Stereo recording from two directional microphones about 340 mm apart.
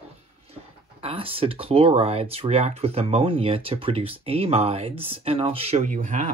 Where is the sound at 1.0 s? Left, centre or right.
Centre.